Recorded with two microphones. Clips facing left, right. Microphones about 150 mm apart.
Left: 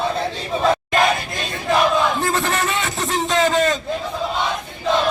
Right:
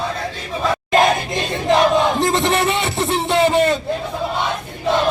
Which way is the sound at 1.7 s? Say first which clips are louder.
Right 3 dB; 25° right (ahead or behind).